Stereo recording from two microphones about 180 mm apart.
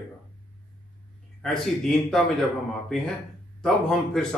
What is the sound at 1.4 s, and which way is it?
Speech, 5° left (ahead or behind).